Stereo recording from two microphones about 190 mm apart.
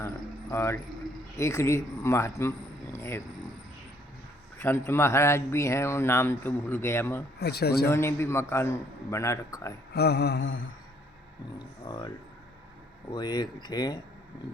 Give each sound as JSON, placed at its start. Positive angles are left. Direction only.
{"t": 0.5, "sound": "speech", "side_deg": 15}
{"t": 2.9, "sound": "a sound", "side_deg": 15}
{"t": 4.5, "sound": "speech", "side_deg": 10}
{"t": 7.3, "sound": "mantra", "side_deg": 60}
{"t": 7.9, "sound": "speech", "side_deg": 15}
{"t": 9.9, "sound": "mantra", "side_deg": 60}
{"t": 11.9, "sound": "speech", "side_deg": 20}
{"t": 13.1, "sound": "speech", "side_deg": 20}